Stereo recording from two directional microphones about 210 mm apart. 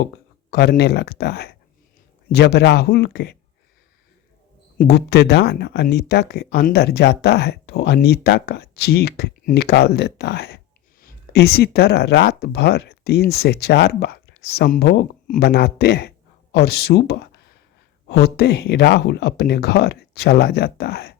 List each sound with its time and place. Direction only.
0.5 s speech: 50° left (ahead or behind)
4.8 s speech: 50° left (ahead or behind)